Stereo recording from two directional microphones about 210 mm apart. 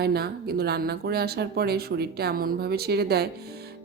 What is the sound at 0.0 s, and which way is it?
Speech, 50° right (ahead or behind).